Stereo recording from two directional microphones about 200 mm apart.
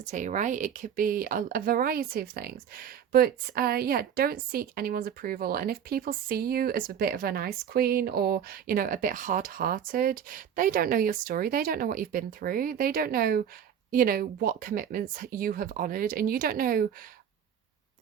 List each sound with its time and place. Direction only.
0.0 s speech: 40° right (ahead or behind)